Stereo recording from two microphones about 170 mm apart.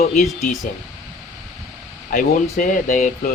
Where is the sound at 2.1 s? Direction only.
50° left (ahead or behind).